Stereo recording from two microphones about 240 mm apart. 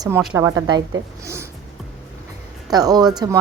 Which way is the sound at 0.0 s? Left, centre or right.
Centre.